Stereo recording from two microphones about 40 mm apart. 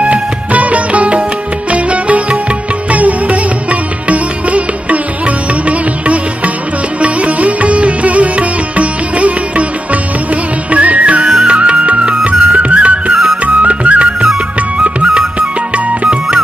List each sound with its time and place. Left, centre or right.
0.0 s music: right
7.0 s sitar: right
10.7 s music: right
13.6 s flute: right